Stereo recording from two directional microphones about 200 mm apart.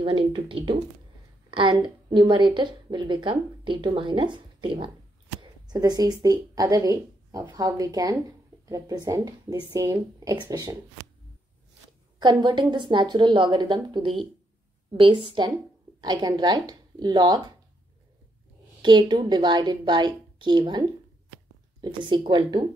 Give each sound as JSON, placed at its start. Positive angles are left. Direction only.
{"t": 0.0, "sound": "a woman's voice", "side_deg": -25}
{"t": 12.2, "sound": "a woman's voice", "side_deg": -20}
{"t": 18.8, "sound": "a woman's voice", "side_deg": -20}
{"t": 21.8, "sound": "a woman's voice", "side_deg": -25}